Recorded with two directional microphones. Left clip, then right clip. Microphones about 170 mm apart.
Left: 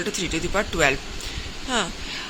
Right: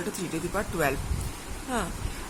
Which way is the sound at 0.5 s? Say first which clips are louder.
Left 7 dB; 15° left (ahead or behind).